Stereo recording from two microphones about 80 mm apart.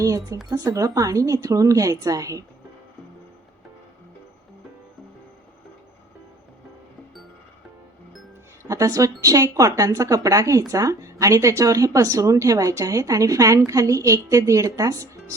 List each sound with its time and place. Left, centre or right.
0.0 s a sound: right
0.5 s speech: right
8.6 s speech: right